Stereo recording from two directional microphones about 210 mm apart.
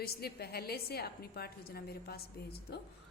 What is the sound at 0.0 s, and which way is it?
A woman's voice, 45° left (ahead or behind).